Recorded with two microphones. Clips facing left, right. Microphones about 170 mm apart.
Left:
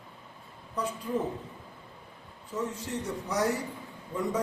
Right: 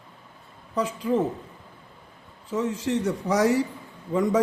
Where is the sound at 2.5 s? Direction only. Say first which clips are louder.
Right 8 dB; 90° right.